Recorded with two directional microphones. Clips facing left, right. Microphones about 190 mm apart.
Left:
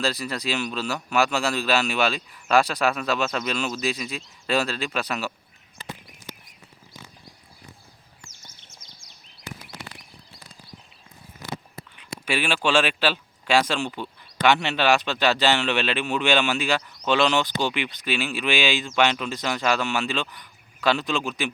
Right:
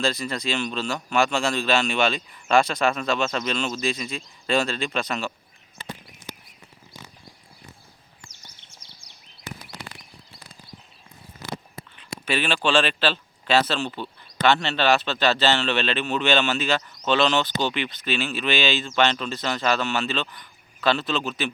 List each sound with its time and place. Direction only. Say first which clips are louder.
0.0 s a man's voice: right 1 dB; 5° left (ahead or behind)
8.8 s a sound: even; 35° right (ahead or behind)
12.2 s speech: even; 10° left (ahead or behind)